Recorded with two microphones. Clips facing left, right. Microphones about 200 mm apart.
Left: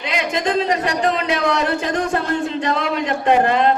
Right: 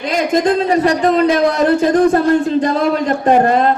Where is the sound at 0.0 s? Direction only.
45° right (ahead or behind).